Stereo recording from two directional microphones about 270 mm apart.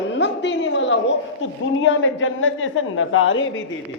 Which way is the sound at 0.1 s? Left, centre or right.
Left.